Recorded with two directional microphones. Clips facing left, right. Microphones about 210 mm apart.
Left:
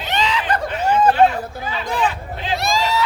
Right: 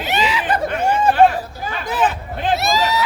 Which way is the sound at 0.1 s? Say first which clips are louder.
Right 1 dB; 10° right (ahead or behind).